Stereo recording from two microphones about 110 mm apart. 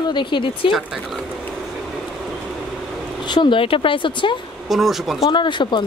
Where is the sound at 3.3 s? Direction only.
45° left (ahead or behind).